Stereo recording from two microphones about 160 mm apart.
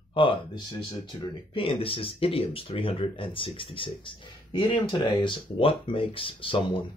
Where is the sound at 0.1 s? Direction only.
35° left (ahead or behind).